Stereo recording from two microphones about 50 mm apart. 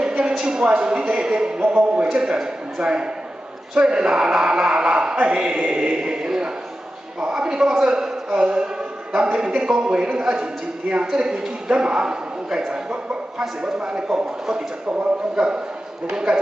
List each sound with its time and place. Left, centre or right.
0.4 s a man's voice: centre